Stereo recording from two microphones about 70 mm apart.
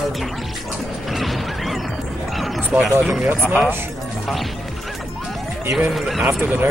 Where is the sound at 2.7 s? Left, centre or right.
Centre.